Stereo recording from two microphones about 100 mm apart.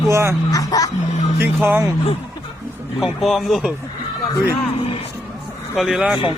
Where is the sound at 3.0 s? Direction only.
Centre (ahead or behind).